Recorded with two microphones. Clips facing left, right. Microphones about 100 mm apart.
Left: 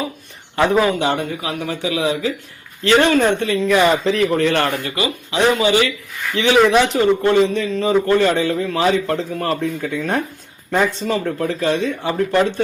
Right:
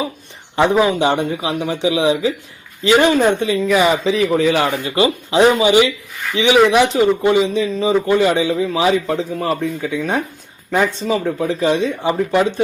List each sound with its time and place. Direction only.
0.5 s a man's voice: 15° right (ahead or behind)
3.7 s speech: 5° right (ahead or behind)
4.9 s a man's voice: 30° right (ahead or behind); by 12.5 s 10° right (ahead or behind)